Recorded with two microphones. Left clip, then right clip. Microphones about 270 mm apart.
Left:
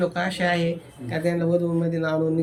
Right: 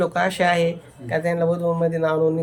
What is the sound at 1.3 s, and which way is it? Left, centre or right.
A man's voice, right.